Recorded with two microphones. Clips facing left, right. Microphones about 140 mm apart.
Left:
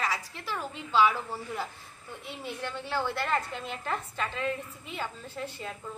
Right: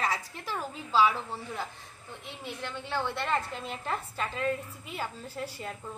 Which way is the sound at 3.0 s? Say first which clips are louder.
Left 1 dB; 5° left (ahead or behind).